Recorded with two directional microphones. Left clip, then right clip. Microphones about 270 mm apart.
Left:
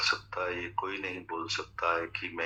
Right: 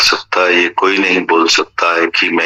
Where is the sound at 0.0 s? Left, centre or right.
Right.